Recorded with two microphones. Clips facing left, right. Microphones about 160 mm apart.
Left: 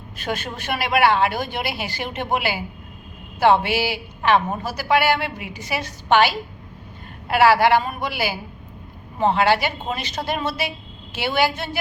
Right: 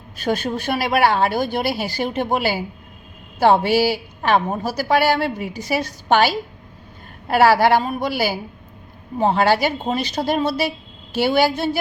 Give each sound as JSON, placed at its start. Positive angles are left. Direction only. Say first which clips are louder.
{"t": 0.2, "sound": "speech", "louder": "right 6 dB", "side_deg": -40}